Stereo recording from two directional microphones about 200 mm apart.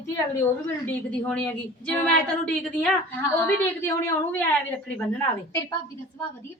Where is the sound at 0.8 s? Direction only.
5° left (ahead or behind).